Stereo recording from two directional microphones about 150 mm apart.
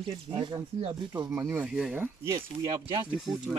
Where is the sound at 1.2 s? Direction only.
20° right (ahead or behind).